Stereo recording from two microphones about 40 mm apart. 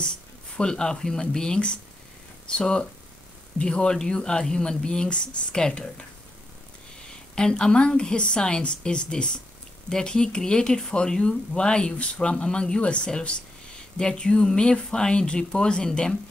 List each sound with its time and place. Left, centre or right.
0.6 s speech: centre
7.3 s speech: centre